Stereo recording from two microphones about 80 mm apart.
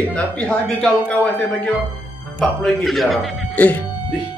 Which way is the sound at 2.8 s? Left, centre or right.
Centre.